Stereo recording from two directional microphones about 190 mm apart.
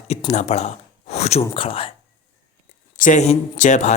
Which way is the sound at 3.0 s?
40° left (ahead or behind).